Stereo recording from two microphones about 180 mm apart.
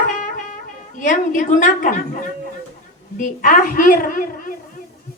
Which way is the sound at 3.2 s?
50° left (ahead or behind).